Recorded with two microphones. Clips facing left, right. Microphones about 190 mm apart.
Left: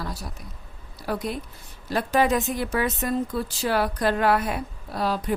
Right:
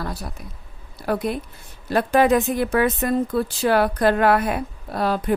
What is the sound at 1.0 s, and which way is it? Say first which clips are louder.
A woman's voice: right 5 dB; 55° right (ahead or behind).